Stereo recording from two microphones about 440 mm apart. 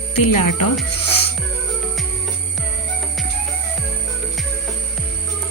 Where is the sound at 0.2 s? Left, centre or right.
Left.